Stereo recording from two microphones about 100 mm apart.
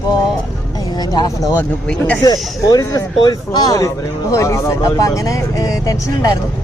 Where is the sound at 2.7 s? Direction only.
40° left (ahead or behind).